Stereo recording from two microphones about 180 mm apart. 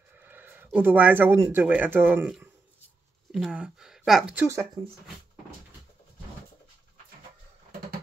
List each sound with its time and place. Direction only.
0.1 s speech: 10° right (ahead or behind)
4.8 s speech: 25° right (ahead or behind)